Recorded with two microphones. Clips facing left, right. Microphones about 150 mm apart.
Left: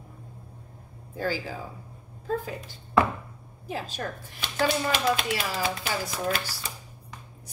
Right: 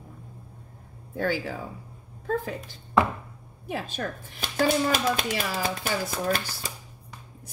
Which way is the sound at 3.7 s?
55° right (ahead or behind).